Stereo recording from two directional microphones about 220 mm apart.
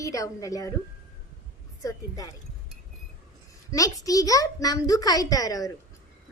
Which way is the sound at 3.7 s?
15° left (ahead or behind).